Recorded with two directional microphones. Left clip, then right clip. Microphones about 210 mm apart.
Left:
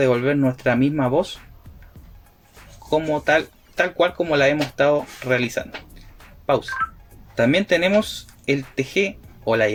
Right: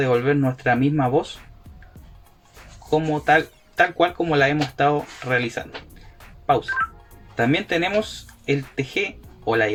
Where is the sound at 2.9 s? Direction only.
45° left (ahead or behind).